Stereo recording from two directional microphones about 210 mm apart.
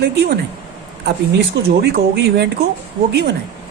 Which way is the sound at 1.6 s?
50° right (ahead or behind).